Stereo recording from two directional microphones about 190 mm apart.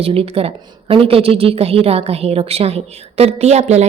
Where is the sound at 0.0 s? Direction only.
30° right (ahead or behind).